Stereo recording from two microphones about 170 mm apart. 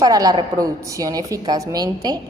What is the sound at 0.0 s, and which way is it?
A woman's voice, 20° right (ahead or behind).